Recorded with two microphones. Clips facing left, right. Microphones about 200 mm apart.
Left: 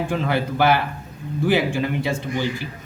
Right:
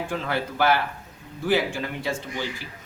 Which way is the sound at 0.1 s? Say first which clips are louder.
Left 5 dB; 20° left (ahead or behind).